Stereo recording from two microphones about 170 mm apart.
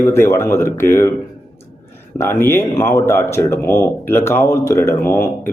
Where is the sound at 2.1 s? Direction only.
15° left (ahead or behind).